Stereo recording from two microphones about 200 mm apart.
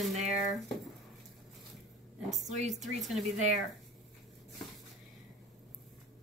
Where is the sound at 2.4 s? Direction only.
35° right (ahead or behind).